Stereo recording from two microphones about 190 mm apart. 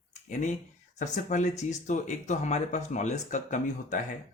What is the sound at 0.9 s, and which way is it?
Speech, 40° left (ahead or behind).